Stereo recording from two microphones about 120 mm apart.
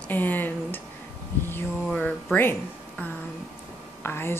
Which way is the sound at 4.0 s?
20° left (ahead or behind).